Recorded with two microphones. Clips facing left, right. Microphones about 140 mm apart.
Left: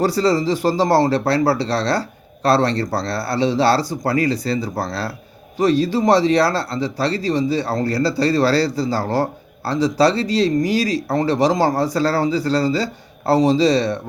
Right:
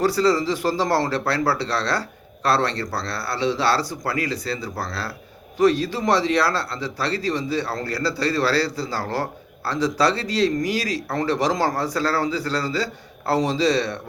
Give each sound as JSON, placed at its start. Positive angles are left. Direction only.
{"t": 0.0, "sound": "speech", "side_deg": 35}